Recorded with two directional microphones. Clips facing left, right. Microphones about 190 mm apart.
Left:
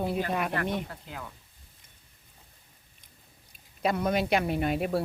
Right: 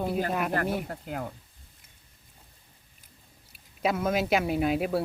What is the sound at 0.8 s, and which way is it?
Speech, 45° right (ahead or behind).